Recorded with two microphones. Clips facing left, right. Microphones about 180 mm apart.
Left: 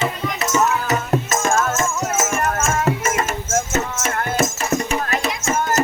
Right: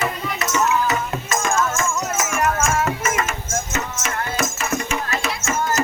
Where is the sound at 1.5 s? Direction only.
25° left (ahead or behind).